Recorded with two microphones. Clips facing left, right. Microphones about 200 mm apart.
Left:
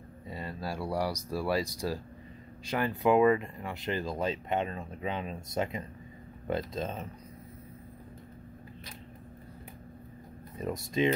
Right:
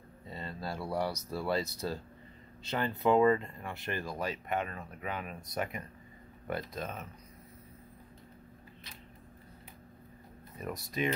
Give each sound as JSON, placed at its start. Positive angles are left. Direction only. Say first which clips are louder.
{"t": 0.3, "sound": "speech", "louder": "left 2 dB", "side_deg": 10}
{"t": 10.6, "sound": "speech", "louder": "left 6 dB", "side_deg": 25}